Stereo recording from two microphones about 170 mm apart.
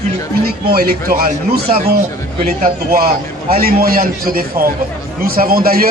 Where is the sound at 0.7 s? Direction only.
65° right (ahead or behind).